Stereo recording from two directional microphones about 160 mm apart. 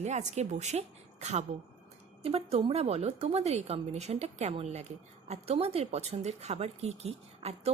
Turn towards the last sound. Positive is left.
turn(degrees=-40)  # may be behind; listen again after turning